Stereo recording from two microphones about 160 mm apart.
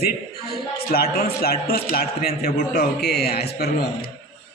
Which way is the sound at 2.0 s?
75° left (ahead or behind).